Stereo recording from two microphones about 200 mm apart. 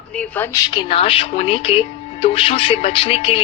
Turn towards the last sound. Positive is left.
turn(degrees=25)  # may be behind; listen again after turning